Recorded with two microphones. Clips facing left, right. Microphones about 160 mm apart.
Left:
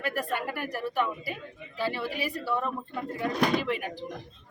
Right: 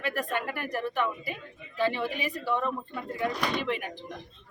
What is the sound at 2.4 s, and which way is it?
Speech, 5° left (ahead or behind).